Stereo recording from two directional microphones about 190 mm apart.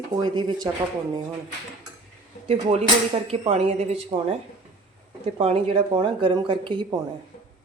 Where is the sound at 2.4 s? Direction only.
35° right (ahead or behind).